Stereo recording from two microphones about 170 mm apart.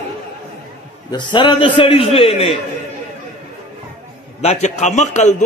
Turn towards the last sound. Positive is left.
turn(degrees=45)  # may be behind; listen again after turning